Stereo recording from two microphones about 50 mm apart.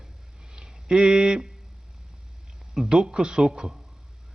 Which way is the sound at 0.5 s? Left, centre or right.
Centre.